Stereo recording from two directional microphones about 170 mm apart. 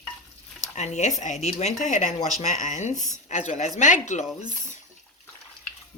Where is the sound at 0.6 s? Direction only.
45° left (ahead or behind).